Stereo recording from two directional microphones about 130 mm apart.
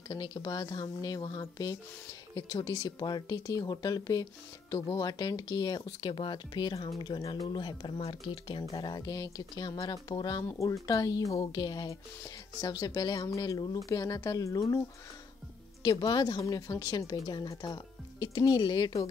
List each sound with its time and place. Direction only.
0.1 s speech: 35° left (ahead or behind)
15.8 s speech: 30° left (ahead or behind)